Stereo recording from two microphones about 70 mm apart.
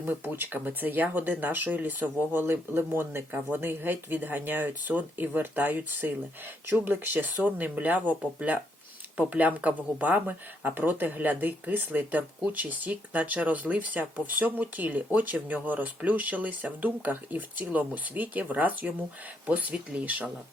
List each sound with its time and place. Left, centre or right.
0.0 s speech: right